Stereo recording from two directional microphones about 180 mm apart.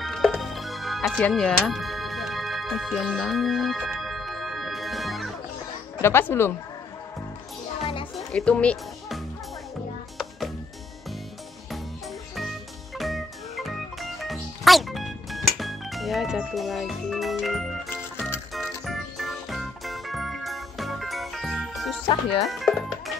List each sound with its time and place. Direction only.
0.0 s music: centre (ahead or behind)
6.0 s speech: 15° left (ahead or behind)
7.8 s music: 30° left (ahead or behind)
8.3 s music: 5° left (ahead or behind)
12.4 s music: centre (ahead or behind)
22.0 s speech: 25° left (ahead or behind)
22.4 s music: centre (ahead or behind)